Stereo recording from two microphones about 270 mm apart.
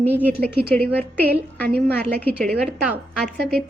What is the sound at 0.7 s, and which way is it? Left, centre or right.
Speech, centre.